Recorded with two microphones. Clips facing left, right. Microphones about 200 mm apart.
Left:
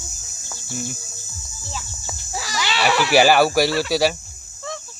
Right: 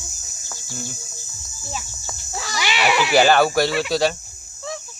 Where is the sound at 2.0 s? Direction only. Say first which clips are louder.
Left 1 dB; 5° left (ahead or behind).